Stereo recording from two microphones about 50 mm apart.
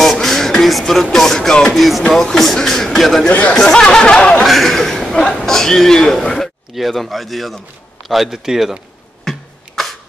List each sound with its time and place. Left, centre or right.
0.0 s a sound: centre
1.1 s speech: centre
1.8 s a man's voice: centre
3.3 s speech: left
3.5 s speech: centre
4.5 s a man's voice: centre
9.2 s a sound: centre